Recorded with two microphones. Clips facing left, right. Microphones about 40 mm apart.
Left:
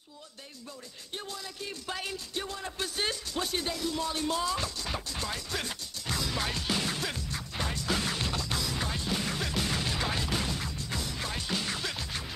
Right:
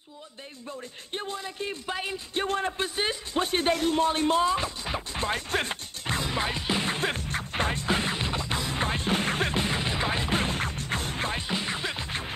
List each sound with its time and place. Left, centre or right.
0.7 s a man's voice: right
2.3 s speech: right
2.8 s a man's voice: right
3.3 s speech: right
5.2 s music: right
11.4 s music: right